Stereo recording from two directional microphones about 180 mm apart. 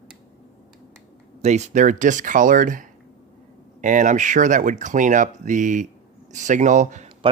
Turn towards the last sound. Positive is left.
turn(degrees=-40)  # may be behind; listen again after turning